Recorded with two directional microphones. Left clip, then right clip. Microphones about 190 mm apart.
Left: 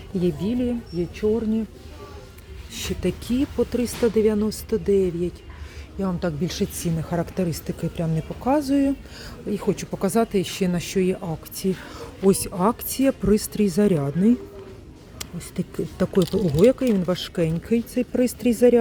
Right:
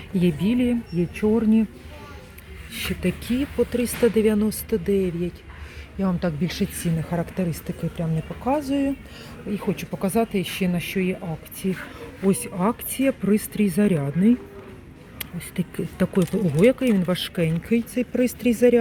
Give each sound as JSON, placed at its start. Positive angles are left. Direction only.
{"t": 0.2, "sound": "speech", "side_deg": 0}
{"t": 1.2, "sound": "speech", "side_deg": -20}
{"t": 2.7, "sound": "speech", "side_deg": 15}